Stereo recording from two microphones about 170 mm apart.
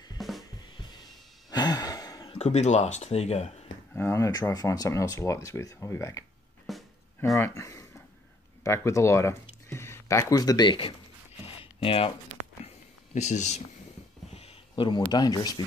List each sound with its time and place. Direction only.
0.2 s drum kit: centre (ahead or behind)
0.6 s drum kit: 25° left (ahead or behind)
1.5 s sigh: 25° left (ahead or behind)
2.3 s speech: 40° left (ahead or behind)
3.9 s speech: 15° left (ahead or behind)
6.7 s music: centre (ahead or behind)
7.3 s speech: 20° left (ahead or behind)
11.4 s a sound: 35° left (ahead or behind)
12.6 s a sound: 45° left (ahead or behind)
14.3 s speech: 35° left (ahead or behind)